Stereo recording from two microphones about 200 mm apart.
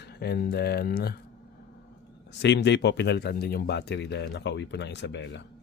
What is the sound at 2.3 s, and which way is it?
Speech, 60° left (ahead or behind).